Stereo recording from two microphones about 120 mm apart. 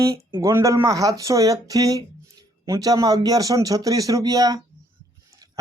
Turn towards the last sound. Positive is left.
turn(degrees=-30)  # may be behind; listen again after turning